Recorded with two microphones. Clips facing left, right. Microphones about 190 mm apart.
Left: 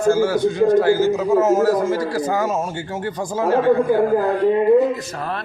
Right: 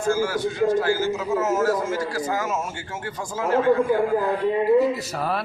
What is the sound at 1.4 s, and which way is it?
A man's voice, 35° left (ahead or behind).